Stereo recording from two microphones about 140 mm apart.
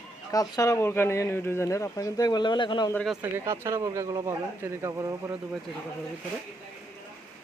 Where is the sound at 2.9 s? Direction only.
Centre (ahead or behind).